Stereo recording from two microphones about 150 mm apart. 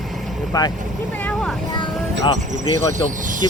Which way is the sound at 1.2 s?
10° left (ahead or behind).